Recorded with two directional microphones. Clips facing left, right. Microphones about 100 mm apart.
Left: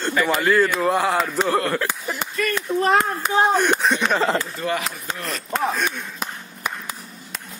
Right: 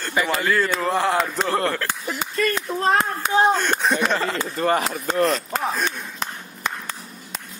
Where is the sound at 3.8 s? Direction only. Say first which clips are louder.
Even; centre (ahead or behind).